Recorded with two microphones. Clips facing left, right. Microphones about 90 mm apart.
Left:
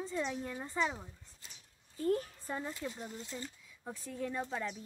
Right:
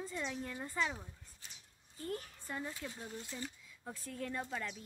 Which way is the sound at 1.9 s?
35° left (ahead or behind).